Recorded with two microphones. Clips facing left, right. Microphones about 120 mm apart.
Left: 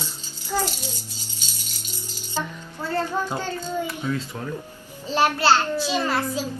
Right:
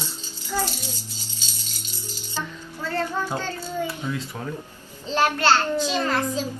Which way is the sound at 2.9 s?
15° left (ahead or behind).